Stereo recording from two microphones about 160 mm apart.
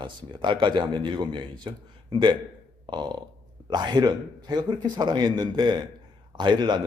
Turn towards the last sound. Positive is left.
turn(degrees=-25)  # may be behind; listen again after turning